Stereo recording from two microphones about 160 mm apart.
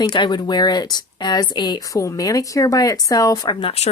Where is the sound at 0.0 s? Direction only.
30° left (ahead or behind).